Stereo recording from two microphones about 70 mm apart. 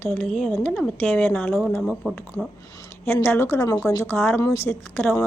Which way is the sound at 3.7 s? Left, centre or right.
Left.